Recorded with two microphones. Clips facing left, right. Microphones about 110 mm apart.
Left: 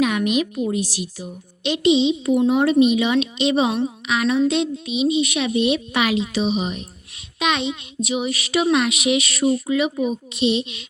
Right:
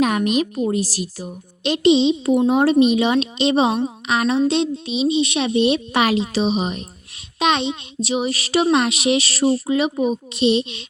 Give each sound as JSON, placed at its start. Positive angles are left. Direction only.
{"t": 0.0, "sound": "a child's voice", "side_deg": -40}